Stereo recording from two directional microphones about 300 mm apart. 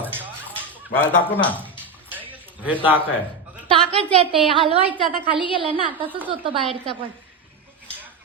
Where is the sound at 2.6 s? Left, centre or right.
Centre.